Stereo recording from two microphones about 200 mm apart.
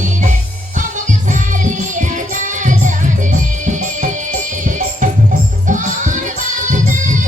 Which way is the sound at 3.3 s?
40° right (ahead or behind).